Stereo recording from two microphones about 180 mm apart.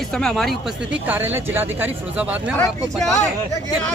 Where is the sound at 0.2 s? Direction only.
Centre (ahead or behind).